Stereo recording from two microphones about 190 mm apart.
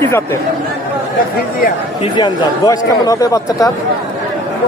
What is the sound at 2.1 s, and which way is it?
Speech, 25° left (ahead or behind).